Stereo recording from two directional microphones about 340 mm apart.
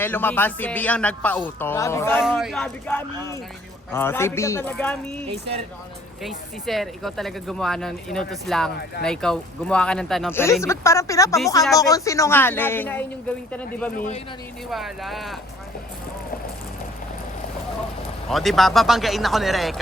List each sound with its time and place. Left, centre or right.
0.0 s speech: centre
5.3 s speech: centre
6.2 s speech: centre
13.9 s speech: left
14.7 s speech: centre
18.3 s speech: centre